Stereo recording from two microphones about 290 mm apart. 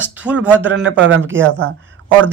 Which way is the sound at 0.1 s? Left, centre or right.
Centre.